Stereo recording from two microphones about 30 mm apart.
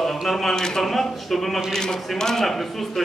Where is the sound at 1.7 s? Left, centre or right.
Centre.